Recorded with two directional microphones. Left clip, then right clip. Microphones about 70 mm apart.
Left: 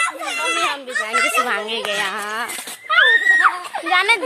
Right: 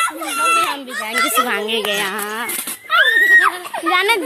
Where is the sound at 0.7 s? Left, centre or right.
Left.